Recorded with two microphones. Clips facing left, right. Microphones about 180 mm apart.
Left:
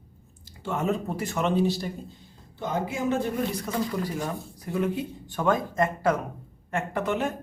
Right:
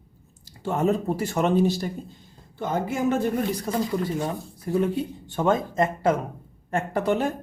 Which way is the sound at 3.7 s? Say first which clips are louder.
Right 3 dB; 35° right (ahead or behind).